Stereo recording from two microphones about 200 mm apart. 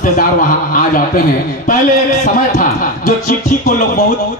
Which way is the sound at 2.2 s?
40° left (ahead or behind).